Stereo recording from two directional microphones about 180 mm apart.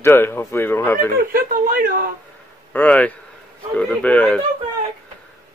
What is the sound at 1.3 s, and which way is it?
Speech, 55° right (ahead or behind).